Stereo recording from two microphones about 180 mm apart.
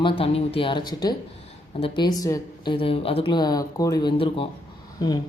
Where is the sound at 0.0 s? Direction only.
30° left (ahead or behind).